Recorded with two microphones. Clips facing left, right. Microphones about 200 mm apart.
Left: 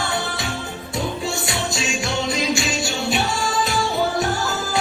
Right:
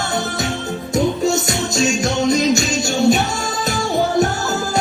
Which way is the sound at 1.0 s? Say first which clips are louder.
Right 8 dB; 45° right (ahead or behind).